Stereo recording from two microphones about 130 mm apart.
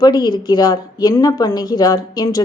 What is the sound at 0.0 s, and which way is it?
A woman's voice, 30° left (ahead or behind).